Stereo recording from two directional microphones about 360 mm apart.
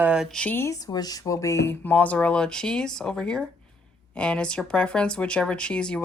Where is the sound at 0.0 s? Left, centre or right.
Centre.